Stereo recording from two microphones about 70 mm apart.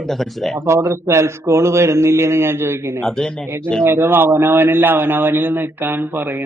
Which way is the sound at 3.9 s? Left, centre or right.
Right.